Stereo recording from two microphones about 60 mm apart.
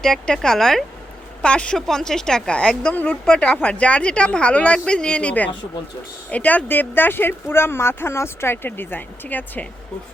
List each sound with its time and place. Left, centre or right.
0.0 s a woman's voice: centre; by 9.6 s left